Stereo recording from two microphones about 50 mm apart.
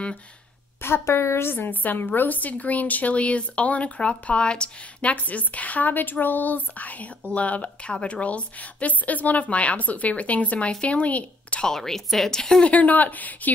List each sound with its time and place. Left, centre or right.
0.7 s a woman's voice: left
11.6 s speech: centre
12.6 s speech: left